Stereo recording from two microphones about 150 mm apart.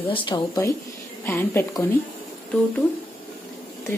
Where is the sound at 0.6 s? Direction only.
20° left (ahead or behind).